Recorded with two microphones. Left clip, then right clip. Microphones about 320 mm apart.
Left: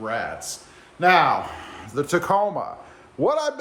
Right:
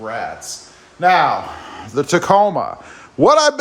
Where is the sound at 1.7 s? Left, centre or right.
Centre.